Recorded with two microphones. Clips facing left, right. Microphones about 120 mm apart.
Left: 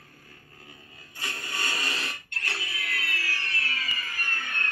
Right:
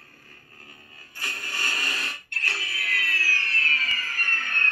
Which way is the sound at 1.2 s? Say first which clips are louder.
Even; 25° left (ahead or behind).